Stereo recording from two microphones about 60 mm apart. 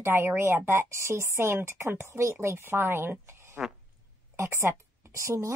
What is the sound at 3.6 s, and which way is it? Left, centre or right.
Fart, centre.